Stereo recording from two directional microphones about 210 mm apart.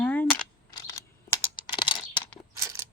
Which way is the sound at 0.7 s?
15° left (ahead or behind).